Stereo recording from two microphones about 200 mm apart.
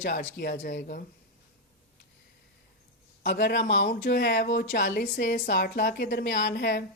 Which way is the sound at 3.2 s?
50° left (ahead or behind).